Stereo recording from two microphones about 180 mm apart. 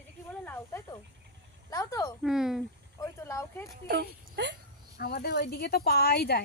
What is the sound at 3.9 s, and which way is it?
Speech, 65° right (ahead or behind).